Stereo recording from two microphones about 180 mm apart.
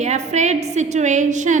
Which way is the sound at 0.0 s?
40° right (ahead or behind).